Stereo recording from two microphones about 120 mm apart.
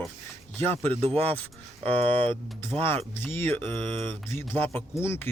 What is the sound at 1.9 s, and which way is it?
Speech, 50° right (ahead or behind).